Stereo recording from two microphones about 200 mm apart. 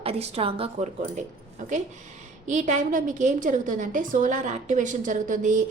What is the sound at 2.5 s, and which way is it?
A woman's voice, 40° right (ahead or behind).